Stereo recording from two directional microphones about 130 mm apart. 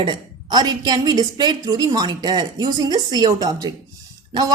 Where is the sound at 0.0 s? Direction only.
35° right (ahead or behind).